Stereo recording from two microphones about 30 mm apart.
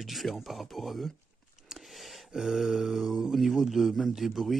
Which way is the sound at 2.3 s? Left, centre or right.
Centre.